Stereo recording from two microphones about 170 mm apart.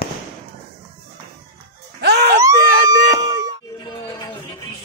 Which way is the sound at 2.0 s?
80° right.